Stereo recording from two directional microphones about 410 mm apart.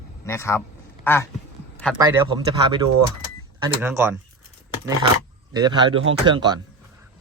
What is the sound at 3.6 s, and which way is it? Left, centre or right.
Speech, centre.